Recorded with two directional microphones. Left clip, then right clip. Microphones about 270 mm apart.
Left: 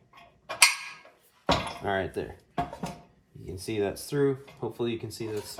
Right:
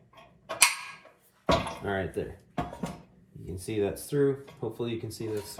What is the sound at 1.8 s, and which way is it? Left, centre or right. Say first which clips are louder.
Speech: left 2 dB; left.